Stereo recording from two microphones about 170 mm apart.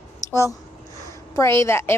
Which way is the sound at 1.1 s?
15° left (ahead or behind).